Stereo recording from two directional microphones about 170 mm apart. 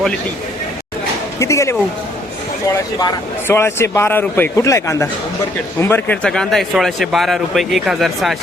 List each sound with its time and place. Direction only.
1.4 s speech: 15° left (ahead or behind)
3.0 s a man's voice: 15° left (ahead or behind)